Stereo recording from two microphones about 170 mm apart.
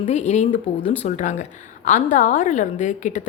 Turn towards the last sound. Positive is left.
turn(degrees=45)  # may be behind; listen again after turning